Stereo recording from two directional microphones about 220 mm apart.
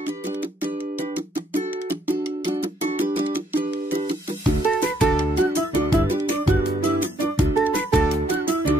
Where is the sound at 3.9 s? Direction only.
25° right (ahead or behind).